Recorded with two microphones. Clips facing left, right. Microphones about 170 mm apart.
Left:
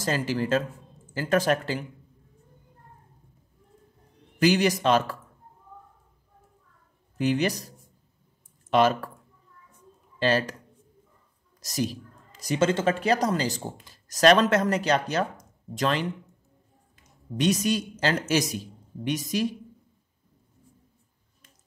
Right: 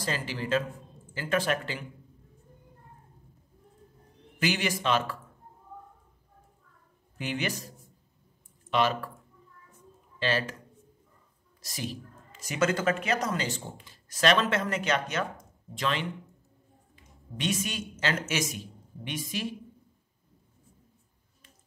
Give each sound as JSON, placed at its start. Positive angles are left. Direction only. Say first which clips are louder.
{"t": 0.0, "sound": "speech", "louder": "left 6 dB", "side_deg": 45}
{"t": 4.4, "sound": "a woman's voice", "louder": "left 8 dB", "side_deg": 40}
{"t": 7.2, "sound": "a woman's voice", "louder": "left 8 dB", "side_deg": 40}
{"t": 10.1, "sound": "speech", "louder": "left 5 dB", "side_deg": 40}
{"t": 11.6, "sound": "a woman's voice", "louder": "left 8 dB", "side_deg": 40}